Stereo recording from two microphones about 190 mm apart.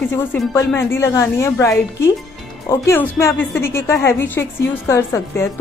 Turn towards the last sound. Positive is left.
turn(degrees=15)  # may be behind; listen again after turning